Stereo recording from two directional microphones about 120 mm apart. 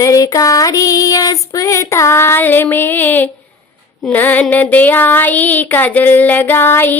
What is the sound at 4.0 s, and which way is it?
Female singing, 15° left (ahead or behind).